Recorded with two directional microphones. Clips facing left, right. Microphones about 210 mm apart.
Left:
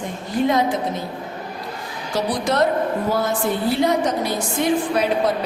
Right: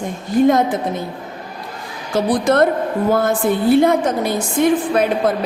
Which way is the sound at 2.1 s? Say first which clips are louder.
Right 6 dB; 50° right (ahead or behind).